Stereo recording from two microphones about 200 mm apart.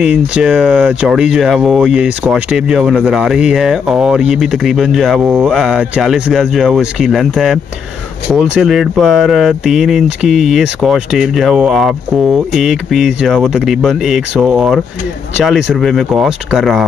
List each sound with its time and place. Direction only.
0.0 s speech: 5° right (ahead or behind)